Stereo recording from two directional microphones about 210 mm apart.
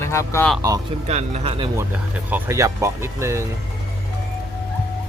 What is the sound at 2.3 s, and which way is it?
Speech, 15° right (ahead or behind).